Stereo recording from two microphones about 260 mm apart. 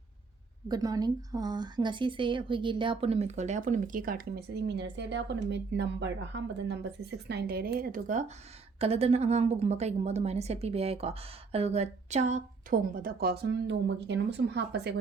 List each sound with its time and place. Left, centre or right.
0.7 s a woman's voice: centre; by 14.9 s right